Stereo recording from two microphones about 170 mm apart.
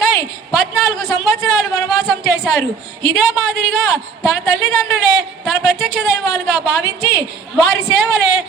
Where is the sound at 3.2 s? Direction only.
Centre (ahead or behind).